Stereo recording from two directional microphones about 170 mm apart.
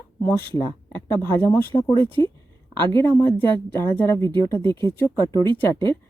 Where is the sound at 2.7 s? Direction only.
25° right (ahead or behind).